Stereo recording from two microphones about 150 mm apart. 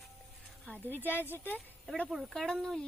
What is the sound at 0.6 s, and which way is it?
Speech, 10° left (ahead or behind).